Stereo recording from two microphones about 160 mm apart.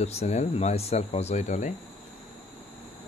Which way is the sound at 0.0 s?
45° left (ahead or behind).